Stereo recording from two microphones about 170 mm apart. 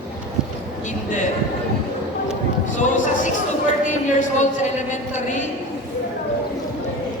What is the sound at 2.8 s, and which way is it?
Speech, 50° left (ahead or behind).